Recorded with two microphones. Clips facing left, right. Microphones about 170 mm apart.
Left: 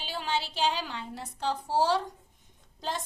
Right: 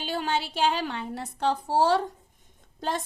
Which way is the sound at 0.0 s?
55° right (ahead or behind).